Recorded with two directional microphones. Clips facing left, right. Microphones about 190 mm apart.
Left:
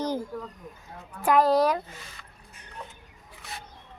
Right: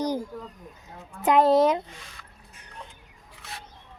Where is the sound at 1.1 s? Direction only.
25° right (ahead or behind).